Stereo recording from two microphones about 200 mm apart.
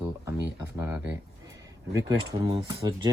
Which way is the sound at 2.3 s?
15° right (ahead or behind).